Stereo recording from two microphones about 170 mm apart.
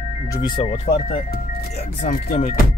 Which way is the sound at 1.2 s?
65° left (ahead or behind).